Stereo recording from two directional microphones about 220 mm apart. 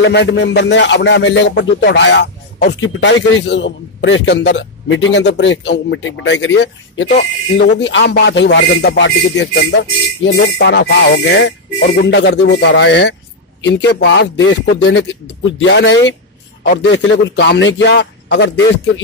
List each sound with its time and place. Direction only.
0.0 s speech: 55° left (ahead or behind)